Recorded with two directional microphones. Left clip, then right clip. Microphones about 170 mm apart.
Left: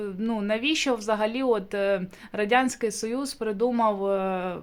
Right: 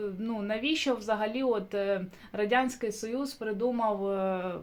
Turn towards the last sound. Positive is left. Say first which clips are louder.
# left 4 dB
turn(degrees=25)  # may be behind; listen again after turning